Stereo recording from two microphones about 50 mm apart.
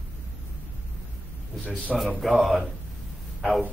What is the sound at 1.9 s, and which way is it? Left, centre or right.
Speech, centre.